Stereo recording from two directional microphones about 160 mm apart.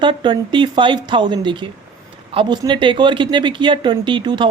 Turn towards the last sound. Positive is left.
turn(degrees=-30)  # may be behind; listen again after turning